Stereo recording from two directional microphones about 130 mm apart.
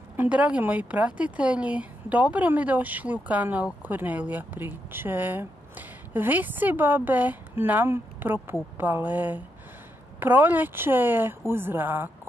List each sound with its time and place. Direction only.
0.1 s speech: 10° right (ahead or behind)